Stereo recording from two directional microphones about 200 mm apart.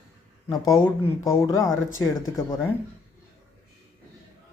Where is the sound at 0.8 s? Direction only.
15° left (ahead or behind).